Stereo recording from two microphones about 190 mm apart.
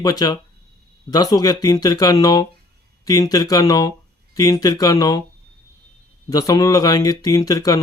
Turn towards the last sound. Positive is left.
turn(degrees=20)  # may be behind; listen again after turning